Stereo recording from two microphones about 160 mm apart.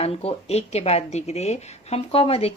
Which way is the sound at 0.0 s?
40° left (ahead or behind).